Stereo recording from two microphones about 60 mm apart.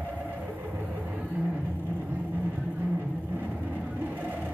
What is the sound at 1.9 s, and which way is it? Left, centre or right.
Vehicle, right.